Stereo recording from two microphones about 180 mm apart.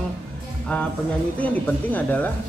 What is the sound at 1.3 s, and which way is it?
Speech, 10° left (ahead or behind).